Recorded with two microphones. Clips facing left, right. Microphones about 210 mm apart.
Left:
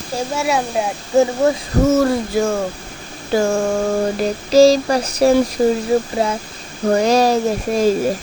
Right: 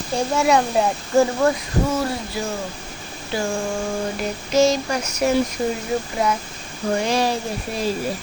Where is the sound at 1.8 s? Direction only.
45° left (ahead or behind).